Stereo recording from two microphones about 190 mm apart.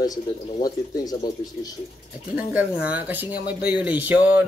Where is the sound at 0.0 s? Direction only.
20° left (ahead or behind).